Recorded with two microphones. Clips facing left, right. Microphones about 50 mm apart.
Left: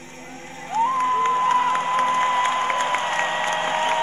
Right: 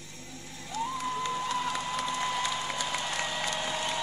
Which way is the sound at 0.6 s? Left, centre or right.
Left.